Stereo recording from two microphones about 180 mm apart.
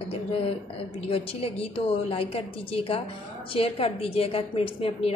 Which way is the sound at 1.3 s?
30° left (ahead or behind).